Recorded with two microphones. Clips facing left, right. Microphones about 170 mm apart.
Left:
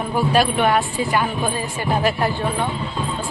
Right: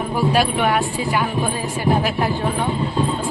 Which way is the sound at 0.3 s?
10° right (ahead or behind).